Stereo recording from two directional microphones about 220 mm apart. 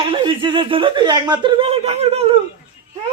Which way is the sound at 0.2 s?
20° right (ahead or behind).